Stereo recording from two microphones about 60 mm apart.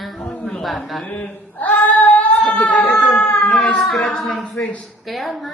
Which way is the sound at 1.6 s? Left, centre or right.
Left.